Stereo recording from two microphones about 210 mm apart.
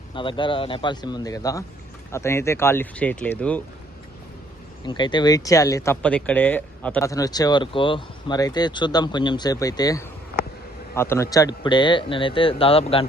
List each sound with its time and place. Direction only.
0.1 s a man's voice: 25° left (ahead or behind); by 3.6 s 5° left (ahead or behind)
4.9 s a man's voice: 20° left (ahead or behind)